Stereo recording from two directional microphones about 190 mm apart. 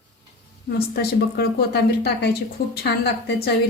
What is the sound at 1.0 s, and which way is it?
Speech, 55° left (ahead or behind).